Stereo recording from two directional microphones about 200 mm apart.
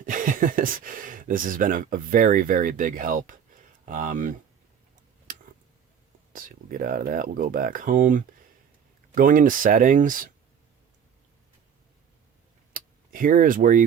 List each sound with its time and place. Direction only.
0.0 s speech: 40° right (ahead or behind)
6.3 s speech: 45° right (ahead or behind)
12.7 s a sound: 45° right (ahead or behind)